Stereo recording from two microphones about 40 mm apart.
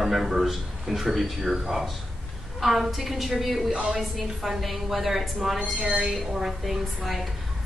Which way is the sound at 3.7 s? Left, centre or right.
Centre.